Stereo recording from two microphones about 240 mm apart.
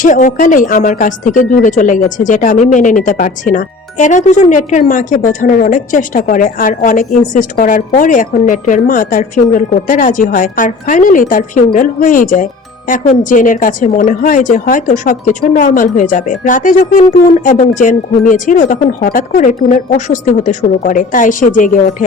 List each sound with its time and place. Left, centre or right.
0.0 s speech: left